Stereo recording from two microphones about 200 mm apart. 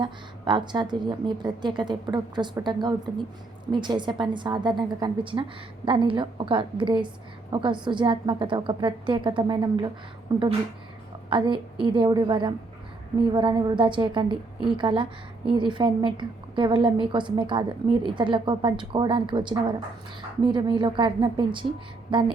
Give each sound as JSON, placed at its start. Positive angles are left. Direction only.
{"t": 0.0, "sound": "a woman's voice", "side_deg": -25}